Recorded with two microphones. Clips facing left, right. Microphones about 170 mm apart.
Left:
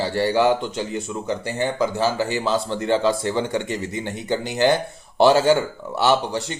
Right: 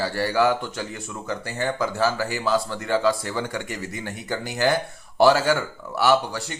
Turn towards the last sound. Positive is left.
turn(degrees=20)  # may be behind; listen again after turning